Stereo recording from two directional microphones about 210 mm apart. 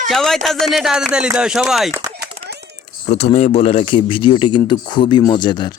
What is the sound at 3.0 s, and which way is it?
Speech, 30° left (ahead or behind).